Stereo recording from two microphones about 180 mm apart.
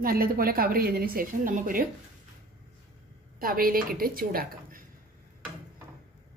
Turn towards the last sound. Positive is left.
turn(degrees=-55)  # may be behind; listen again after turning